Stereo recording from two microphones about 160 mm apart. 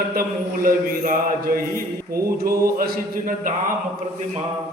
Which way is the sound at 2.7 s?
65° right (ahead or behind).